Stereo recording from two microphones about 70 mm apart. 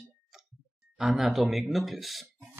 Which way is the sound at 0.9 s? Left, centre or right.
Centre.